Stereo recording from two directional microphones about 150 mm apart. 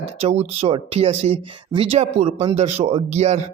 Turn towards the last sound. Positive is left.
turn(degrees=-50)  # may be behind; listen again after turning